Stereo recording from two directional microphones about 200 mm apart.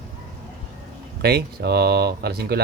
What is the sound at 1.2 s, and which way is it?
Speech, 55° right (ahead or behind).